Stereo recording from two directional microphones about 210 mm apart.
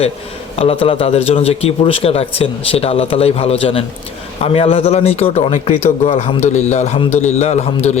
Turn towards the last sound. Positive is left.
turn(degrees=30)  # may be behind; listen again after turning